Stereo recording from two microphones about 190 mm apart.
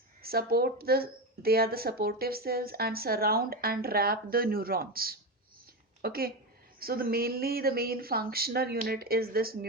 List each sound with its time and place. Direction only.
0.2 s a woman's voice: 55° right (ahead or behind)